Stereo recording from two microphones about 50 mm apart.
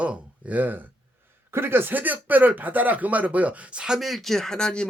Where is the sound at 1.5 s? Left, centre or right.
Right; by 4.0 s centre.